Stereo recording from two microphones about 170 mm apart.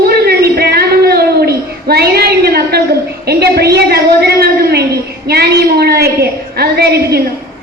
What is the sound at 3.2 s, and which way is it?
A woman's voice, 70° right (ahead or behind).